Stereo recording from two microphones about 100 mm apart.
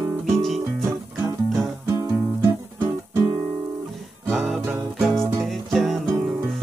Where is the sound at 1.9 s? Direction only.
30° right (ahead or behind).